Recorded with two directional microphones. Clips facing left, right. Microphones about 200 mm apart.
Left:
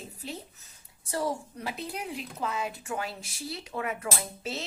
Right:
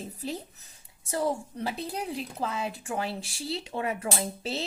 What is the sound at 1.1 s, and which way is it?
Speech, 20° right (ahead or behind).